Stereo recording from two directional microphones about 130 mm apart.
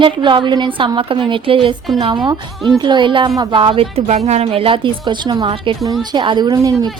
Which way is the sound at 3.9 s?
55° right (ahead or behind).